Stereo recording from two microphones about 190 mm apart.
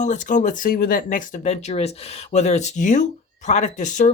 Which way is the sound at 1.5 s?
35° left (ahead or behind).